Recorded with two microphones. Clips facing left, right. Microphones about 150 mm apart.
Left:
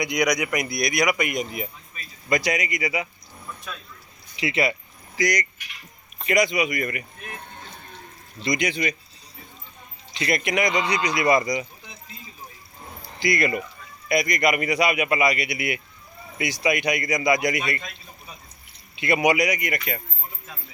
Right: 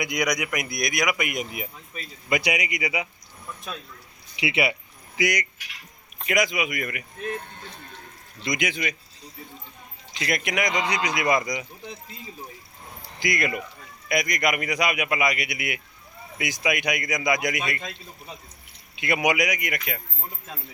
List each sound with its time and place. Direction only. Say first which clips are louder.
0.0 s speech: left 3 dB; centre (ahead or behind)
4.4 s a sound: left 1 dB; 10° right (ahead or behind)
6.1 s speech: left 3 dB; centre (ahead or behind)
10.2 s speech: left 3 dB; centre (ahead or behind)
13.3 s speech: left 4 dB; centre (ahead or behind)
18.9 s speech: left 3 dB; centre (ahead or behind)